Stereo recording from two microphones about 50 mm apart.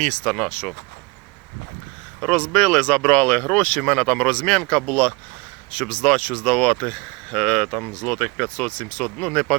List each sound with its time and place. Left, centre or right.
0.0 s speech: left
2.3 s speech: left
7.8 s speech: left
8.0 s speech: centre